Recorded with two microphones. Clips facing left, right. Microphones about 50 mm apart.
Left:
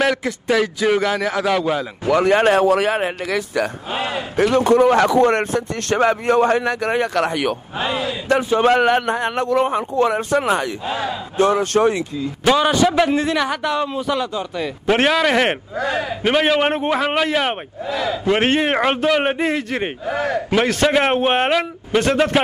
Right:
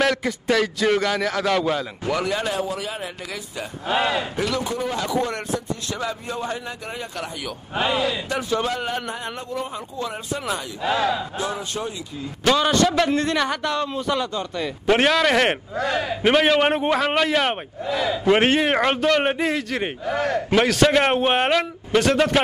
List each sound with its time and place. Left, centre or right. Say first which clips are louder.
0.0 s a man's voice: left 2 dB; centre
2.0 s speech: left 10 dB; left
3.9 s a man's voice: right 6 dB; right
4.4 s speech: left 11 dB; left
8.4 s a man's voice: left 5 dB; left
8.6 s speech: left 11 dB; left
9.4 s speech: left 12 dB; left
10.9 s a man's voice: right 7 dB; right
11.3 s speech: left 11 dB; left
12.4 s a man's voice: left 3 dB; centre